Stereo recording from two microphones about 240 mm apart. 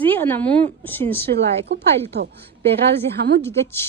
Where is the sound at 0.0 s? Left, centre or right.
Centre.